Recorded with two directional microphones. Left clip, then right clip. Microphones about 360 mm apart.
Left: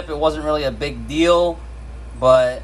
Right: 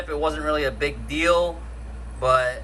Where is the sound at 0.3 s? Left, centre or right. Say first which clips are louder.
Left 5 dB; centre.